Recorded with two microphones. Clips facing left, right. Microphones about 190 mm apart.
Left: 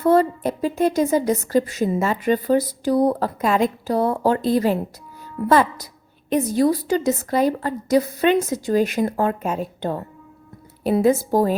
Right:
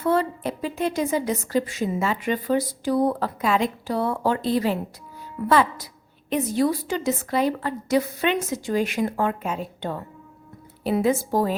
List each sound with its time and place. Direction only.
0.0 s a woman's voice: 40° left (ahead or behind)